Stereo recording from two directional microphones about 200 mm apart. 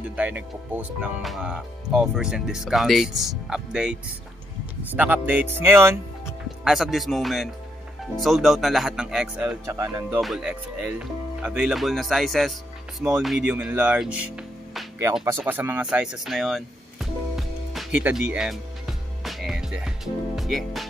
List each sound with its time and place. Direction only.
0.1 s speech: 5° right (ahead or behind)
6.6 s speech: centre (ahead or behind)
9.8 s speech: 15° right (ahead or behind)
10.0 s speech: 5° right (ahead or behind)
15.2 s a sound: 10° right (ahead or behind)
20.3 s speech: centre (ahead or behind)